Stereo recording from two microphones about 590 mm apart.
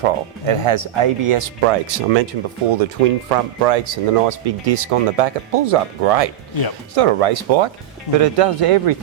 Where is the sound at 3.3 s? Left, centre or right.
Right.